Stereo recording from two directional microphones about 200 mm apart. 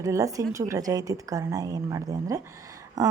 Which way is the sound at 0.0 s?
15° right (ahead or behind).